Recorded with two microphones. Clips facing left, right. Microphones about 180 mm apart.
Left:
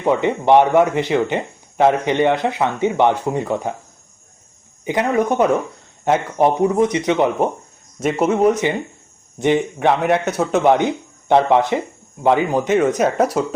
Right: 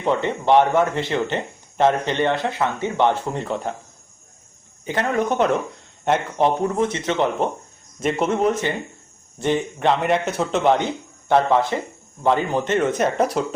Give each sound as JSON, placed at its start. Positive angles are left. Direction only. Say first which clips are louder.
{"t": 0.0, "sound": "speech", "louder": "left 4 dB", "side_deg": 15}
{"t": 4.9, "sound": "speech", "louder": "left 4 dB", "side_deg": 15}